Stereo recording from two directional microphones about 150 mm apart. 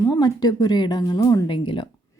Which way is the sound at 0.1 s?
25° left (ahead or behind).